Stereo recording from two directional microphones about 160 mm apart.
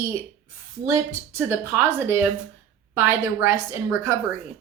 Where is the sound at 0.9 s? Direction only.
15° right (ahead or behind).